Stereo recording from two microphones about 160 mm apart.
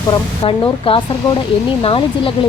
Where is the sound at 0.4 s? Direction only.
35° left (ahead or behind).